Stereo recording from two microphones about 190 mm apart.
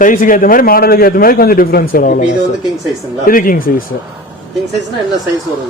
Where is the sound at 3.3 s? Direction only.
45° left (ahead or behind).